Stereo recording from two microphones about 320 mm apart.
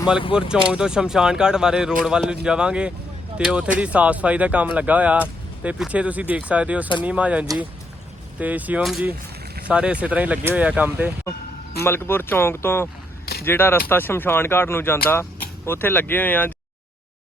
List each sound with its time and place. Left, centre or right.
0.3 s speech: centre
11.8 s speech: centre